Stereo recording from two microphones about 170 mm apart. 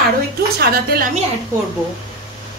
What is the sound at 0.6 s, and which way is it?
Speech, 65° right (ahead or behind).